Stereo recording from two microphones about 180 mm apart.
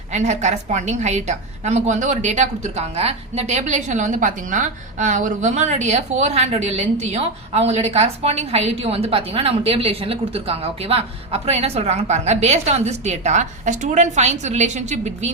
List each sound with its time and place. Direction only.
0.1 s a woman's voice: 40° right (ahead or behind)